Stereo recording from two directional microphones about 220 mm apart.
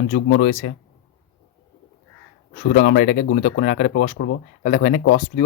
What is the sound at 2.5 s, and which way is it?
Speech, 45° left (ahead or behind).